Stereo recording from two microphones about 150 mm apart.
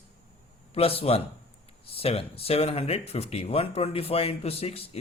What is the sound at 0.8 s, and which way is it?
A man's voice, 40° left (ahead or behind).